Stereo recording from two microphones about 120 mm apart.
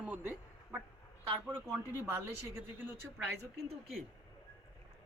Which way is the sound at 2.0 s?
20° right (ahead or behind).